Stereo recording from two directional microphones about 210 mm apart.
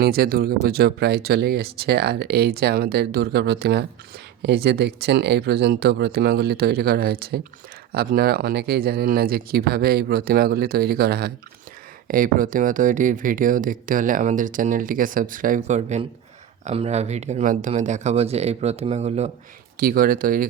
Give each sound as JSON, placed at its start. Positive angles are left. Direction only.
{"t": 0.0, "sound": "speech", "side_deg": -45}
{"t": 19.7, "sound": "speech", "side_deg": -45}